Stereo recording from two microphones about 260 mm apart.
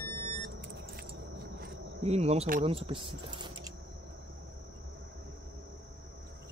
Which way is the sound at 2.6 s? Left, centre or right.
Right.